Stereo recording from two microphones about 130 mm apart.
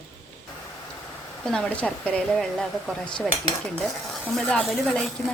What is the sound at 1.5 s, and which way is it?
A woman's voice, 10° left (ahead or behind).